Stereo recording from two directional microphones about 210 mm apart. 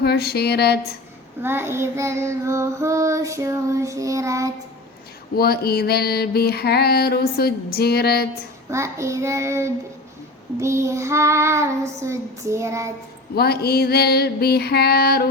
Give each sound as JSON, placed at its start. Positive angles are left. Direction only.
{"t": 0.0, "sound": "mantra", "side_deg": 50}
{"t": 1.4, "sound": "child singing", "side_deg": -10}
{"t": 5.4, "sound": "mantra", "side_deg": 45}
{"t": 8.7, "sound": "child singing", "side_deg": -15}
{"t": 13.3, "sound": "mantra", "side_deg": 50}